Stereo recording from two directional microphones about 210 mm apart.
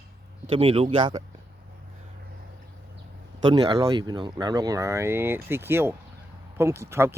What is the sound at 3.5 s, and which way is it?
Speech, 20° right (ahead or behind).